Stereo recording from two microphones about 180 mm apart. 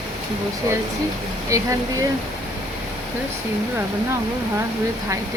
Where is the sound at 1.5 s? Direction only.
20° right (ahead or behind).